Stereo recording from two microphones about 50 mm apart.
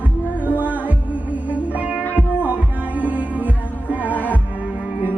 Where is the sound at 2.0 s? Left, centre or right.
Left.